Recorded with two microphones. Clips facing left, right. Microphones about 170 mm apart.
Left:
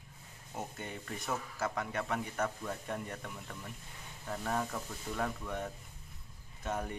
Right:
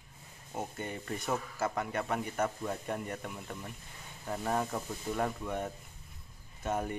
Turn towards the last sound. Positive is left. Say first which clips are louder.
# right 4 dB
turn(degrees=-5)  # may be behind; listen again after turning